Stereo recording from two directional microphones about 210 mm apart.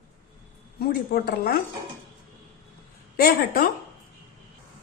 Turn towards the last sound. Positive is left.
turn(degrees=50)  # may be behind; listen again after turning